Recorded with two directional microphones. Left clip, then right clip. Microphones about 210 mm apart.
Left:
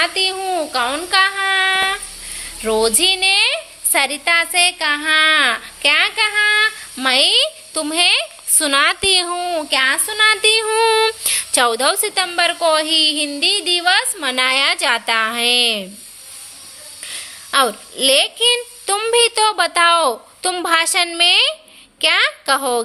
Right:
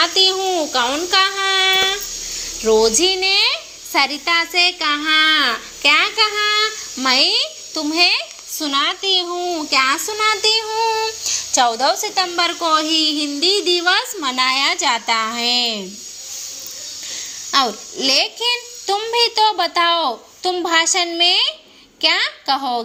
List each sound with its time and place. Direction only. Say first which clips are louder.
0.0 s a sound: right 3 dB; 10° left (ahead or behind)
2.6 s a woman's voice: right 1 dB; 25° left (ahead or behind)
9.6 s a woman's voice: right 1 dB; 20° left (ahead or behind)
17.1 s child singing: even; 20° left (ahead or behind)
22.0 s a woman's voice: left 2 dB; 25° left (ahead or behind)